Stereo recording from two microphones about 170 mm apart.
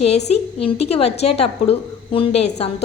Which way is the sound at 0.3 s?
35° left (ahead or behind).